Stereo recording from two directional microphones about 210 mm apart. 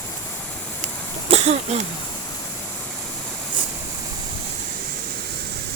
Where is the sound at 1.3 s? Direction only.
30° right (ahead or behind).